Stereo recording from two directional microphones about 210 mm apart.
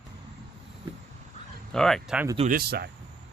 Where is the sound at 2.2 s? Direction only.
25° right (ahead or behind).